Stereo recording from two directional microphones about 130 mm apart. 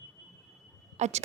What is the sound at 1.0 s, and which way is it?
Speech, 60° right (ahead or behind).